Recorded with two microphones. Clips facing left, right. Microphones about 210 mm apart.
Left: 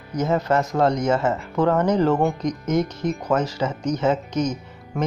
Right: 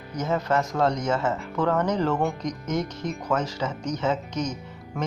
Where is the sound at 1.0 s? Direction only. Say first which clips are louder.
Left 4 dB; 50° left (ahead or behind).